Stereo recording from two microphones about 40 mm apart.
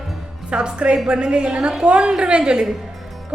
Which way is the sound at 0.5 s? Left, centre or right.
Right.